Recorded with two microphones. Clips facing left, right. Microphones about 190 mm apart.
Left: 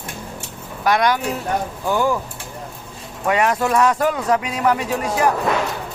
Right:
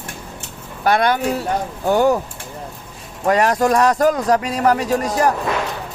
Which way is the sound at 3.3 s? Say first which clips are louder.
Right 3 dB; 40° right (ahead or behind).